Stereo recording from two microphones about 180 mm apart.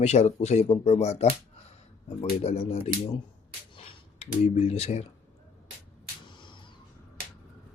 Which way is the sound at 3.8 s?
35° left (ahead or behind).